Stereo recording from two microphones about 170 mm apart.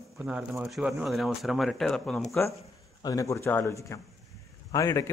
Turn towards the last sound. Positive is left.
turn(degrees=20)  # may be behind; listen again after turning